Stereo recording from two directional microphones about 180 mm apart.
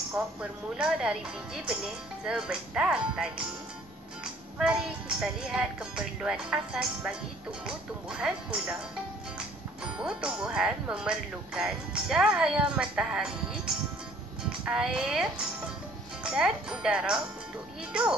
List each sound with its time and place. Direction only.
0.1 s speech: 5° right (ahead or behind)
9.9 s speech: 5° right (ahead or behind)
14.6 s speech: 5° right (ahead or behind)
16.3 s speech: 5° right (ahead or behind)